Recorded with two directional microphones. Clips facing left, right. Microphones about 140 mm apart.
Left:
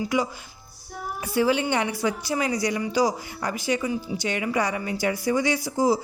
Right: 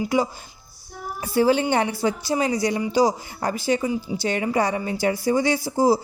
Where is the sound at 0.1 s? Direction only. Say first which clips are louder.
Right 3 dB; 30° right (ahead or behind).